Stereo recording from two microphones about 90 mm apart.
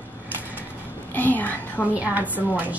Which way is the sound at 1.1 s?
20° left (ahead or behind).